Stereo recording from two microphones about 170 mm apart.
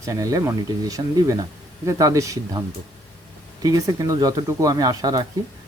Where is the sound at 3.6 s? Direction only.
20° right (ahead or behind).